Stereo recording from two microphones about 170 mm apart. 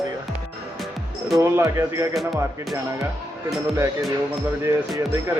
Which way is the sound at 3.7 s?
15° right (ahead or behind).